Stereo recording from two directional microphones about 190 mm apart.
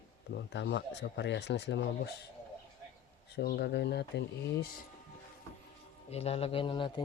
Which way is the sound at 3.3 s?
60° left (ahead or behind).